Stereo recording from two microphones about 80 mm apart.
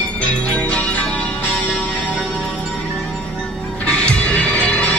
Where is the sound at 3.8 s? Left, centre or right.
Centre.